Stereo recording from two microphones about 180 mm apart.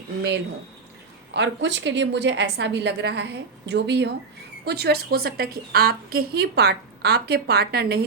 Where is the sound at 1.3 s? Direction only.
75° right (ahead or behind).